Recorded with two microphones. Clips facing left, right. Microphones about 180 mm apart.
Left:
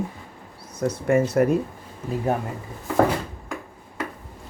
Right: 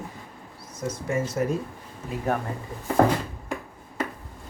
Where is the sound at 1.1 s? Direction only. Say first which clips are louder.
Left 7 dB; 65° left (ahead or behind).